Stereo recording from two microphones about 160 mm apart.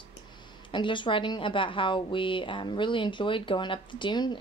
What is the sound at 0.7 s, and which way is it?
A woman's voice, 30° left (ahead or behind).